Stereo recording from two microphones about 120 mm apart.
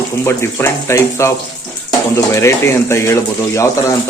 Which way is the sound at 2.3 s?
25° left (ahead or behind).